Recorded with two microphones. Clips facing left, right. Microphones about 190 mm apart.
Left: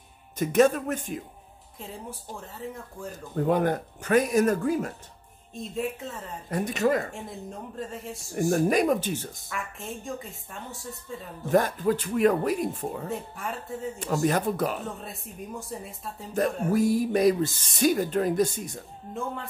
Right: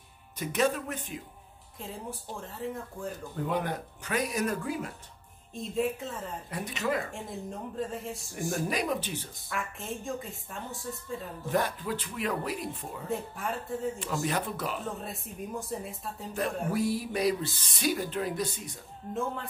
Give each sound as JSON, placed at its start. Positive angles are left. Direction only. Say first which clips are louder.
{"t": 0.4, "sound": "speech", "louder": "left 7 dB", "side_deg": 45}
{"t": 1.8, "sound": "a woman's voice", "louder": "even", "side_deg": 0}
{"t": 3.3, "sound": "speech", "louder": "left 8 dB", "side_deg": 50}
{"t": 5.5, "sound": "a woman's voice", "louder": "right 1 dB", "side_deg": 0}
{"t": 6.5, "sound": "speech", "louder": "left 7 dB", "side_deg": 45}
{"t": 7.2, "sound": "a woman's voice", "louder": "even", "side_deg": 0}
{"t": 8.5, "sound": "speech", "louder": "left 8 dB", "side_deg": 50}
{"t": 9.5, "sound": "a woman's voice", "louder": "right 1 dB", "side_deg": 0}
{"t": 11.5, "sound": "speech", "louder": "left 7 dB", "side_deg": 45}
{"t": 13.1, "sound": "a woman's voice", "louder": "even", "side_deg": 0}
{"t": 13.9, "sound": "speech", "louder": "left 6 dB", "side_deg": 45}
{"t": 15.0, "sound": "a woman's voice", "louder": "even", "side_deg": 0}
{"t": 16.7, "sound": "speech", "louder": "left 9 dB", "side_deg": 45}